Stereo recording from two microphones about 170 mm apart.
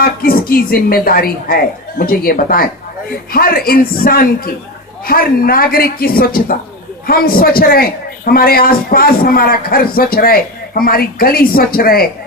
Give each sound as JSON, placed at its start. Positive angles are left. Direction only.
{"t": 0.0, "sound": "a man's voice", "side_deg": 60}